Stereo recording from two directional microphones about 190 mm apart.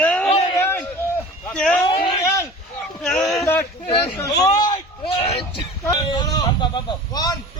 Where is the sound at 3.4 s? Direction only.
15° left (ahead or behind).